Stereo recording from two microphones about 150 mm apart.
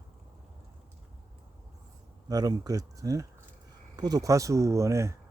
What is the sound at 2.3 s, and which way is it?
Speech, 25° right (ahead or behind).